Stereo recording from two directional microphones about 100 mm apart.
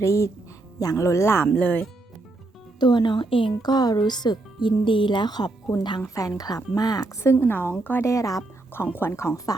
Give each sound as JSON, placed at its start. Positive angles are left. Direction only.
{"t": 0.0, "sound": "speech", "side_deg": 30}
{"t": 1.5, "sound": "speech", "side_deg": 15}
{"t": 2.8, "sound": "speech", "side_deg": 50}
{"t": 3.6, "sound": "a woman's voice", "side_deg": 45}
{"t": 8.1, "sound": "speech", "side_deg": 35}
{"t": 8.7, "sound": "a woman's voice", "side_deg": 25}